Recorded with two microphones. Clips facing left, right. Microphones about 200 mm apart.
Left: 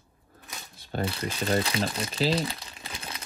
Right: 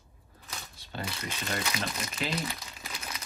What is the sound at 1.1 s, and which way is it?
Crumpling, 30° left (ahead or behind).